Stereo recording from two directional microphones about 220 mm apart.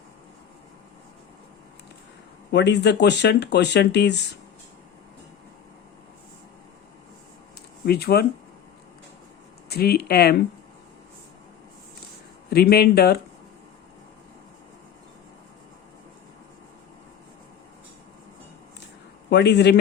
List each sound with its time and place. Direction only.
2.5 s speech: 50° left (ahead or behind)
7.9 s speech: 45° left (ahead or behind)
9.6 s speech: 45° left (ahead or behind)
12.5 s speech: 45° left (ahead or behind)
19.3 s speech: 50° left (ahead or behind)